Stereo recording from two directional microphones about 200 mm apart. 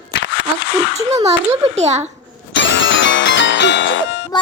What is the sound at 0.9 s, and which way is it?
A child's voice, 35° right (ahead or behind).